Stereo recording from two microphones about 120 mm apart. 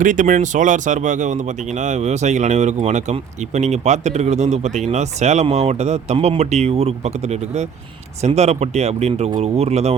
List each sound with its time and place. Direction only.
0.0 s speech: 90° right; by 9.9 s 65° right (ahead or behind)